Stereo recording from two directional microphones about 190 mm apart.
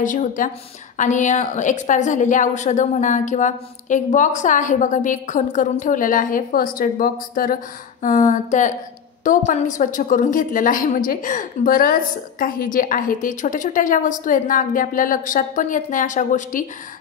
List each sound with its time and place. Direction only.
0.0 s a woman's voice: 45° left (ahead or behind)